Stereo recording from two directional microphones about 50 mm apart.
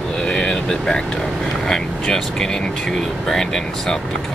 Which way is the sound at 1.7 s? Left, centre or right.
Centre.